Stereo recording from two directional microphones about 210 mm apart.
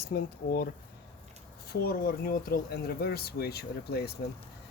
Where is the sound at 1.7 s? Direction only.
45° left (ahead or behind).